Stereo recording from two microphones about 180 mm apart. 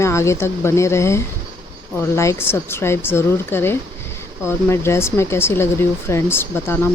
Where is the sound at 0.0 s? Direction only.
15° left (ahead or behind).